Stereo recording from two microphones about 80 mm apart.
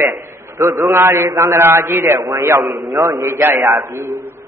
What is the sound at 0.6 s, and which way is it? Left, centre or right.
A man's voice, right.